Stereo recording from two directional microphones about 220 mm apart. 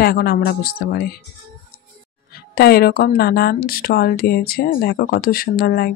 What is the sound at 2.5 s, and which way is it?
Speech, 45° left (ahead or behind).